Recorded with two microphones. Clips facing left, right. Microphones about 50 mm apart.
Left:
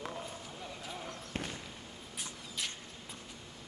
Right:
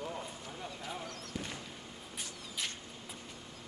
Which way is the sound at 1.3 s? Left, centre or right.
Left.